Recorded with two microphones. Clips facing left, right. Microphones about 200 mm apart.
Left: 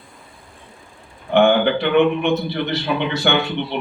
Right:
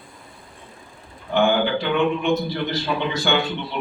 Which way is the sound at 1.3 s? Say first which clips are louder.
Left 4 dB; 65° left (ahead or behind).